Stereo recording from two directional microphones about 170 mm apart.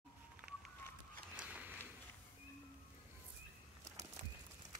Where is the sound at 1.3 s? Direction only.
5° right (ahead or behind).